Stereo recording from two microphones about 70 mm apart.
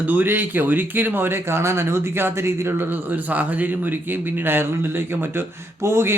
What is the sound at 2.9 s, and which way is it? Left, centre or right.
A man's voice, right.